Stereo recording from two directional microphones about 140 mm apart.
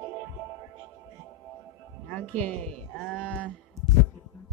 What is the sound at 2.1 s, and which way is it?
Speech, 10° left (ahead or behind).